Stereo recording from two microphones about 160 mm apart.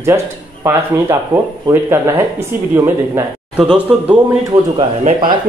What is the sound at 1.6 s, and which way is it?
Speech, 15° right (ahead or behind).